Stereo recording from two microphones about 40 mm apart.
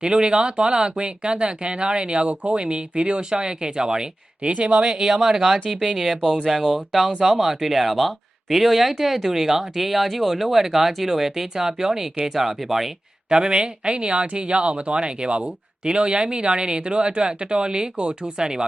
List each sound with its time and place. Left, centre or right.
0.0 s speech: right
4.9 s speech: centre
13.3 s speech: right